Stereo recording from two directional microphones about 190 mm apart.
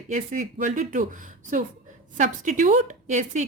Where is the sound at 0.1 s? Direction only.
40° right (ahead or behind).